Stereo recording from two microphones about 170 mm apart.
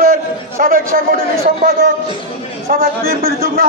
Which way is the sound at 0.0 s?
55° right (ahead or behind).